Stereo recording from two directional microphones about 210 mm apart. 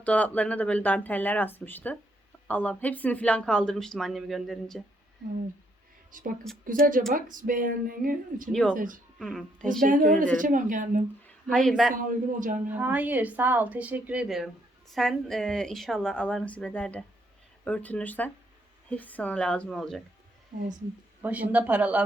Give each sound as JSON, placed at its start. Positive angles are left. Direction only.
{"t": 0.0, "sound": "a woman's voice", "side_deg": 5}
{"t": 6.1, "sound": "speech", "side_deg": -40}
{"t": 9.1, "sound": "a woman's voice", "side_deg": 0}
{"t": 9.8, "sound": "speech", "side_deg": -40}
{"t": 11.4, "sound": "a woman's voice", "side_deg": 5}
{"t": 11.9, "sound": "speech", "side_deg": -40}
{"t": 12.6, "sound": "a woman's voice", "side_deg": -10}
{"t": 21.2, "sound": "speech", "side_deg": -5}